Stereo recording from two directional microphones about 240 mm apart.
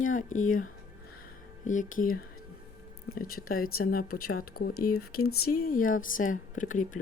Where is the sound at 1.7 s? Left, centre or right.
Left.